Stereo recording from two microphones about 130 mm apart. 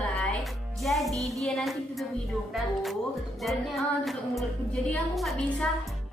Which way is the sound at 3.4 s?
Centre (ahead or behind).